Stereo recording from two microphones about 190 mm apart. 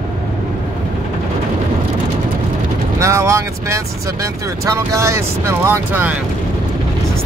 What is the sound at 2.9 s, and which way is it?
Vehicle, 15° right (ahead or behind).